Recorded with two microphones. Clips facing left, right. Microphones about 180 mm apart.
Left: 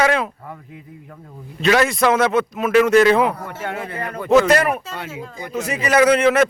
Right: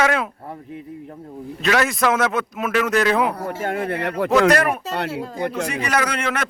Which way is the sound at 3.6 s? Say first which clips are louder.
Right 4 dB; 50° right (ahead or behind).